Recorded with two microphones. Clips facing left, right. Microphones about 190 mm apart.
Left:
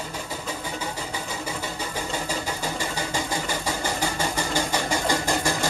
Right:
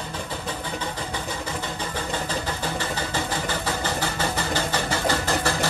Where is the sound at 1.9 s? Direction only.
10° left (ahead or behind).